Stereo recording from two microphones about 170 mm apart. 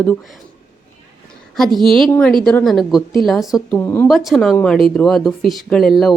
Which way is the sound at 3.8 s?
15° left (ahead or behind).